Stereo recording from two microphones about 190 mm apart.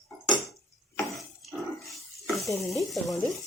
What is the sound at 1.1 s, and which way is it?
Dishes, centre (ahead or behind).